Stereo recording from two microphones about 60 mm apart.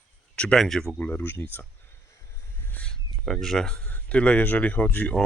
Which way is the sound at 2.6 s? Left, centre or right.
Left.